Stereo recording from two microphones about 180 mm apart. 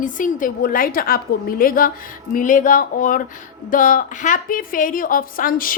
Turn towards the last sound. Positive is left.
turn(degrees=50)  # may be behind; listen again after turning